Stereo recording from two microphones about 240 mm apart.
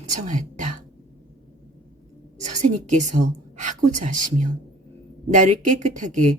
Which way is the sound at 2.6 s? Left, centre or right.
Right.